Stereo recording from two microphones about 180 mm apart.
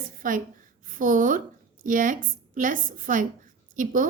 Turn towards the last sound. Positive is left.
turn(degrees=-50)  # may be behind; listen again after turning